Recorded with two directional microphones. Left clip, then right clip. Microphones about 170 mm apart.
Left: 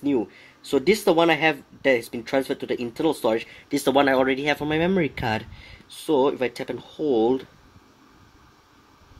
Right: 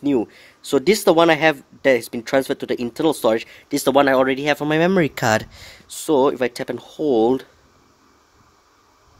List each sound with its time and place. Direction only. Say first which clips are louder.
0.0 s speech: right 4 dB; 45° right (ahead or behind)